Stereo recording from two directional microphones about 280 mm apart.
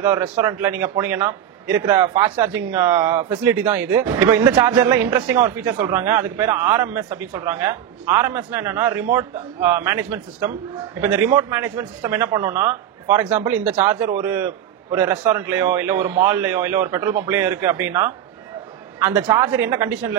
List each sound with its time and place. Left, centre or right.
0.0 s a man's voice: centre